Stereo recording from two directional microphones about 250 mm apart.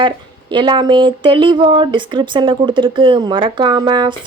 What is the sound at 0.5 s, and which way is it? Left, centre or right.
Speech, centre.